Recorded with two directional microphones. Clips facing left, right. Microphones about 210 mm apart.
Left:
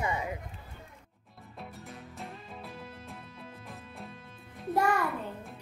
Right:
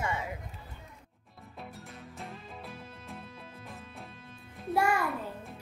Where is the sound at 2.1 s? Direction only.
Centre (ahead or behind).